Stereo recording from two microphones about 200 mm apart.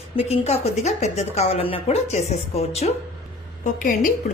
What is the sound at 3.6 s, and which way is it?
Speech, 40° left (ahead or behind).